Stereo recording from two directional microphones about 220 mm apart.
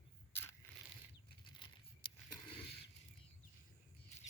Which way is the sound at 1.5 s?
20° left (ahead or behind).